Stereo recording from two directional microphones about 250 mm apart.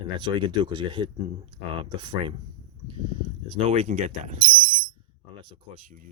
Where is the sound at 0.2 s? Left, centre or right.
Centre.